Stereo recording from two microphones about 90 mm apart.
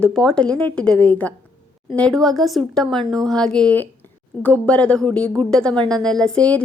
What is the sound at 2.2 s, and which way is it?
A woman's voice, centre (ahead or behind).